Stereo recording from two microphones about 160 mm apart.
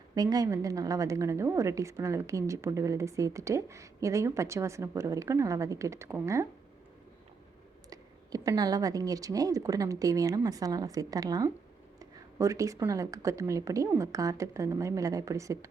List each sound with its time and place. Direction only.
0.1 s a woman's voice: 25° right (ahead or behind)
7.9 s a woman's voice: 20° right (ahead or behind)